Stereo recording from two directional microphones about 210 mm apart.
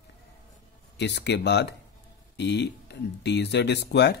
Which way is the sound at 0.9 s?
55° left (ahead or behind).